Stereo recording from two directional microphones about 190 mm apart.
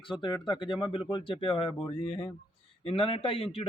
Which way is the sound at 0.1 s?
25° left (ahead or behind).